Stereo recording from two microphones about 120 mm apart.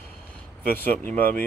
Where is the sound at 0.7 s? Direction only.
15° left (ahead or behind).